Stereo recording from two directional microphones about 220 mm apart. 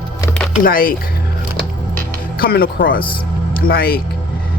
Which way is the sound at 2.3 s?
45° left (ahead or behind).